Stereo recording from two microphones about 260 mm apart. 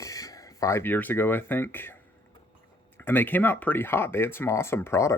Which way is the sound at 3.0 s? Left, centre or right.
Centre.